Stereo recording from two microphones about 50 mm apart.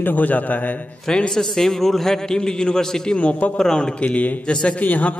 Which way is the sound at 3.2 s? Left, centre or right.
Left.